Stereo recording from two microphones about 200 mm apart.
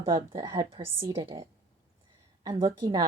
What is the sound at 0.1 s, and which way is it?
A woman's voice, 15° right (ahead or behind).